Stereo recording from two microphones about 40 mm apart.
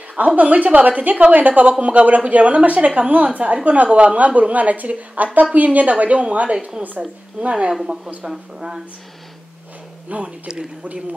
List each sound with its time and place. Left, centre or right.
0.4 s speech: right
7.0 s a woman's voice: centre
8.2 s speech: centre
10.0 s speech: right